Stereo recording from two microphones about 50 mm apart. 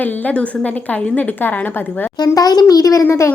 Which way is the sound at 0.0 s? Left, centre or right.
Left.